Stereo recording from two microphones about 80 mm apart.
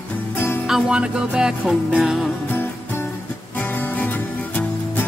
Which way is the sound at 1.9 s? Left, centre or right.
Centre.